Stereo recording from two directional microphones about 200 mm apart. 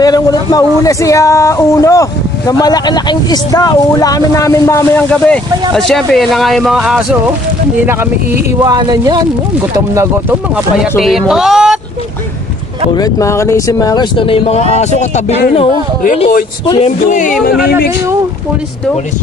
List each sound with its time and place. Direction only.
0.0 s speech: 20° left (ahead or behind); by 9.2 s 20° right (ahead or behind)
11.0 s speech: centre (ahead or behind)
12.9 s speech: 15° left (ahead or behind)
16.8 s speech: 40° left (ahead or behind)